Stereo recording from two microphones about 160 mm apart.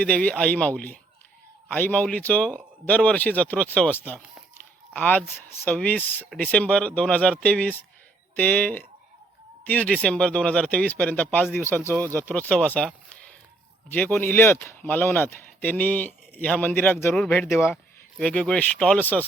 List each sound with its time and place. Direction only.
0.0 s speech: 5° left (ahead or behind)